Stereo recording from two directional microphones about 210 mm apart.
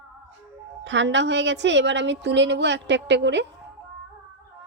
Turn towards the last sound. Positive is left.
turn(degrees=-55)  # may be behind; listen again after turning